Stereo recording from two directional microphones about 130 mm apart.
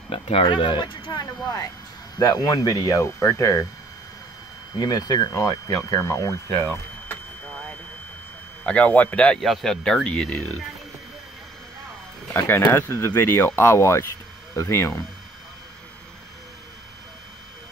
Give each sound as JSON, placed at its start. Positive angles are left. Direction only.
{"t": 0.1, "sound": "speech", "side_deg": 45}
{"t": 4.7, "sound": "speech", "side_deg": 30}
{"t": 8.6, "sound": "speech", "side_deg": 10}
{"t": 12.4, "sound": "speech", "side_deg": 15}